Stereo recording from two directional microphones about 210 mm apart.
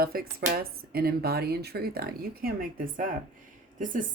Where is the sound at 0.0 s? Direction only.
45° right (ahead or behind).